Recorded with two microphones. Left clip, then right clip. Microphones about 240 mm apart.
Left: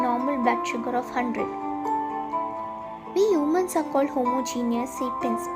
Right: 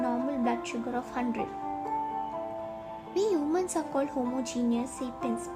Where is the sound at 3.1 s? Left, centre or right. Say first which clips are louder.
Left 6 dB; centre.